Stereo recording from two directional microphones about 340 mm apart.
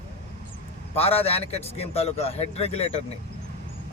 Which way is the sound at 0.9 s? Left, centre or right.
Centre.